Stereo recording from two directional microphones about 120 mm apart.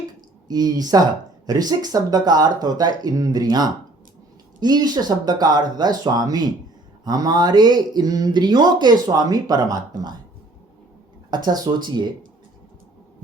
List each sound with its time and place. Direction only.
0.4 s speech: 35° right (ahead or behind)
11.4 s speech: 35° right (ahead or behind)